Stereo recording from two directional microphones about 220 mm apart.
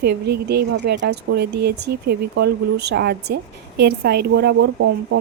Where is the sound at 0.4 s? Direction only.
50° right (ahead or behind).